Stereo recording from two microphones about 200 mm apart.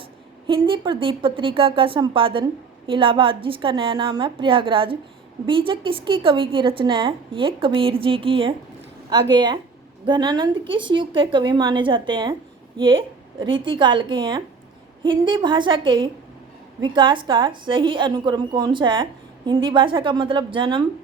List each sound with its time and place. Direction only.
0.4 s a woman's voice: 25° right (ahead or behind)
10.1 s a woman's voice: 20° right (ahead or behind)